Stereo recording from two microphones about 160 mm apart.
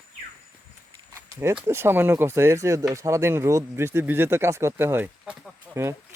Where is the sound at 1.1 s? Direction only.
15° right (ahead or behind).